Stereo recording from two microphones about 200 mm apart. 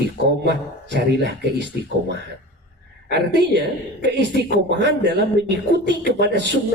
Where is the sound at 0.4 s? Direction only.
60° right (ahead or behind).